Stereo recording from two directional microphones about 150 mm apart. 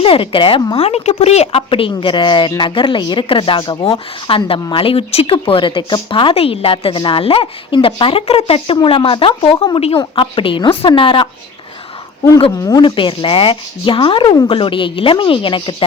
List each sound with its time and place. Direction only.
0.0 s speech: 35° left (ahead or behind)
12.6 s speech: 30° left (ahead or behind)